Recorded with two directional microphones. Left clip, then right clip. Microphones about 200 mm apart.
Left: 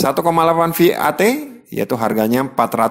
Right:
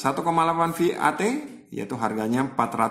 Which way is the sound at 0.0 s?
40° left (ahead or behind).